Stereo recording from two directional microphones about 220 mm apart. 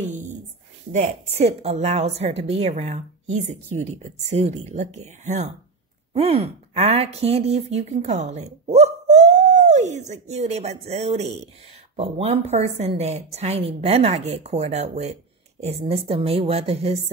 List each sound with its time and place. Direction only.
0.9 s a woman's voice: 30° right (ahead or behind)